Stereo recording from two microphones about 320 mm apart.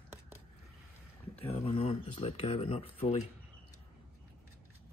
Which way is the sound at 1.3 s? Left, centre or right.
Centre.